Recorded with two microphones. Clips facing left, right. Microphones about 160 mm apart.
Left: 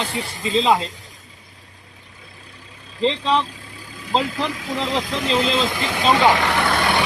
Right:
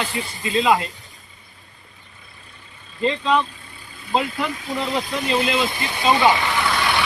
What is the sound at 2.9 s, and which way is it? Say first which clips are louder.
Speech: even; 90° left.